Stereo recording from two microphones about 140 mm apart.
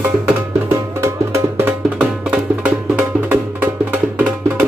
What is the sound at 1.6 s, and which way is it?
Music, 10° right (ahead or behind).